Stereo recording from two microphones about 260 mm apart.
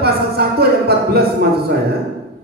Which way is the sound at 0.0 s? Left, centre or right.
Right.